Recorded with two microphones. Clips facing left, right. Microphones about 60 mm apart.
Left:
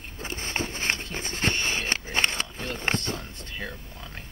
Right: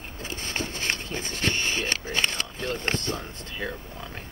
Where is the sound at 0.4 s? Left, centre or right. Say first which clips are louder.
Left 1 dB; left.